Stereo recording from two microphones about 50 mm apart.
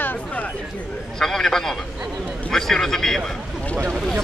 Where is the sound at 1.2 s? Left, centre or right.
Centre.